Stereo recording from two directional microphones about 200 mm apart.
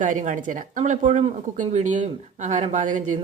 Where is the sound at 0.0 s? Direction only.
40° right (ahead or behind).